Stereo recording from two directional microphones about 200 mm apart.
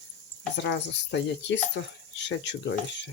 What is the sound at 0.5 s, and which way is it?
Speech, 60° left (ahead or behind).